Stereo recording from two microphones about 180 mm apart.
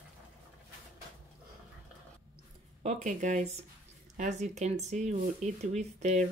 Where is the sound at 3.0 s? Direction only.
40° right (ahead or behind).